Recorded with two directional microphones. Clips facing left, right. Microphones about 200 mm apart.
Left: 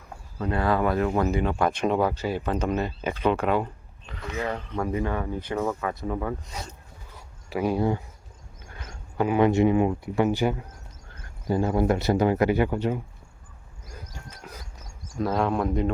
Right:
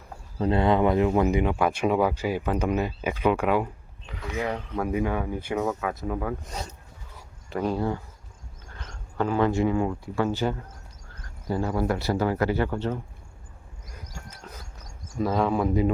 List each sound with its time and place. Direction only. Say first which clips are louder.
0.3 s speech: right 3 dB; 25° right (ahead or behind); by 6.3 s 5° right (ahead or behind)
7.5 s speech: left 2 dB; 10° left (ahead or behind)
14.5 s a sound: left 2 dB; 10° left (ahead or behind)
15.2 s speech: right 1 dB; centre (ahead or behind)